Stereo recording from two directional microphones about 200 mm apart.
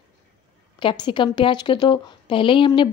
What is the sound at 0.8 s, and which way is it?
A woman's voice, 25° left (ahead or behind).